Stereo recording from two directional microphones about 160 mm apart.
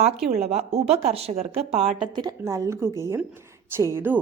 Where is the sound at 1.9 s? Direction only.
30° right (ahead or behind).